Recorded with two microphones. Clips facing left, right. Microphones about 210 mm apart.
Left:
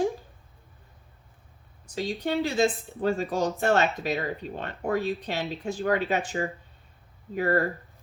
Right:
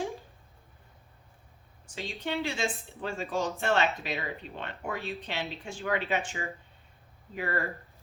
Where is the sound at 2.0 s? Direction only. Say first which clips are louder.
Left 6 dB; 40° left (ahead or behind).